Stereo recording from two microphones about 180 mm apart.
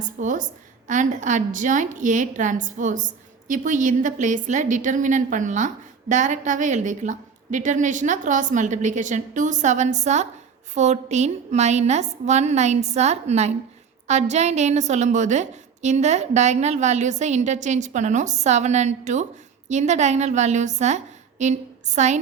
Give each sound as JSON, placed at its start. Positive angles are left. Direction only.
{"t": 0.0, "sound": "a woman's voice", "side_deg": -45}